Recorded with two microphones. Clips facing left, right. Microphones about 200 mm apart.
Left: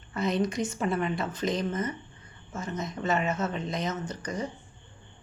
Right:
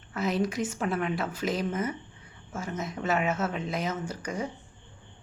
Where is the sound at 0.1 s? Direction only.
5° right (ahead or behind).